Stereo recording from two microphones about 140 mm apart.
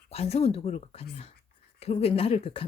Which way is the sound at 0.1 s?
45° left (ahead or behind).